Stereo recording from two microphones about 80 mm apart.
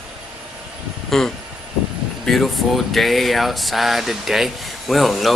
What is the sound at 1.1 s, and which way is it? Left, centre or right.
Speech, centre.